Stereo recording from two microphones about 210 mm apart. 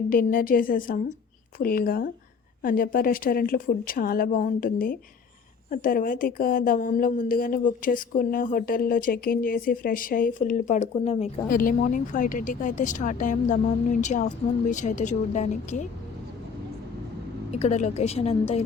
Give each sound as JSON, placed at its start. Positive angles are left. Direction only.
{"t": 0.1, "sound": "a woman's voice", "side_deg": 40}
{"t": 11.4, "sound": "a woman's voice", "side_deg": 40}
{"t": 17.5, "sound": "a woman's voice", "side_deg": 30}